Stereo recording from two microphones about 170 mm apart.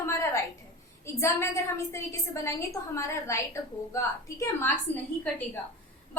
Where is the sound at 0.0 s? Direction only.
15° left (ahead or behind).